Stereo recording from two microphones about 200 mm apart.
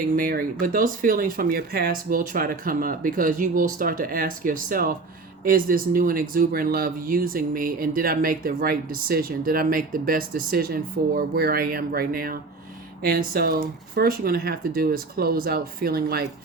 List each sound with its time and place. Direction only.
0.2 s speech: 45° right (ahead or behind)